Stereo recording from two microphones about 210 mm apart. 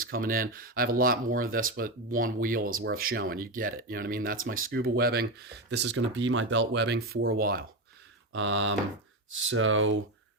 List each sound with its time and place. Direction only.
0.0 s speech: 45° right (ahead or behind)
8.3 s mantra: 65° right (ahead or behind)
9.4 s speech: 70° right (ahead or behind)